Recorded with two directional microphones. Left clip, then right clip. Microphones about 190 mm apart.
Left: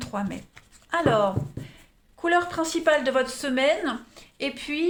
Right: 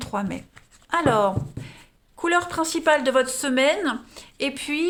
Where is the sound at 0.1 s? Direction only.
30° right (ahead or behind).